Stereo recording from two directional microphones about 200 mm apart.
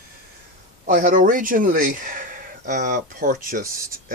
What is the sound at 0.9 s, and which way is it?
Speech, 40° right (ahead or behind).